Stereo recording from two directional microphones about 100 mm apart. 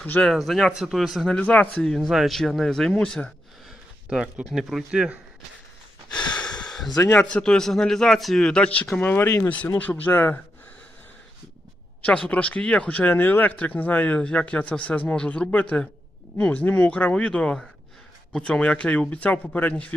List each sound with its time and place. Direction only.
0.0 s speech: 15° left (ahead or behind)
0.3 s a man's voice: centre (ahead or behind)
1.3 s speech: 15° left (ahead or behind)
1.9 s a man's voice: centre (ahead or behind)
4.1 s a man's voice: 10° right (ahead or behind)
6.7 s a sound: centre (ahead or behind)
6.9 s speech: 35° left (ahead or behind)
7.2 s speech: 10° left (ahead or behind)
12.0 s speech: 10° left (ahead or behind)
16.6 s speech: 15° left (ahead or behind)